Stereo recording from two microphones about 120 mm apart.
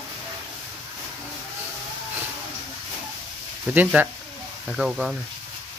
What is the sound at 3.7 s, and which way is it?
Speech, 15° right (ahead or behind).